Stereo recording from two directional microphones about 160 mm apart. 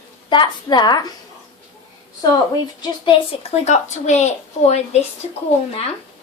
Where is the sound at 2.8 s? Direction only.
30° left (ahead or behind).